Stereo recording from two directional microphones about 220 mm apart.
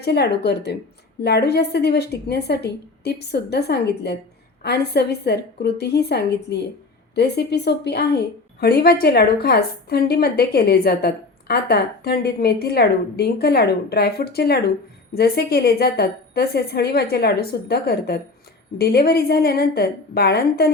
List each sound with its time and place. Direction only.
0.0 s a woman's voice: 50° left (ahead or behind)